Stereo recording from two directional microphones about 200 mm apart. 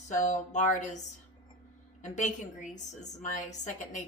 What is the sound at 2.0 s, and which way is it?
Speech, 40° left (ahead or behind).